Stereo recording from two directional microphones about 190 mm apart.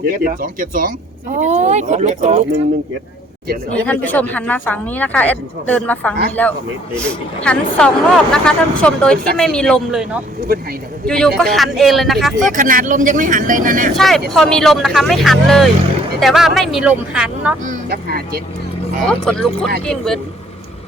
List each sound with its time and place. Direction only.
0.0 s speech: 50° right (ahead or behind)
3.8 s speech: 10° left (ahead or behind)
10.5 s speech: 55° right (ahead or behind)
11.0 s speech: 5° left (ahead or behind)
12.5 s speech: 45° right (ahead or behind)
13.9 s speech: centre (ahead or behind)
17.7 s speech: 55° right (ahead or behind)
19.2 s speech: 5° left (ahead or behind)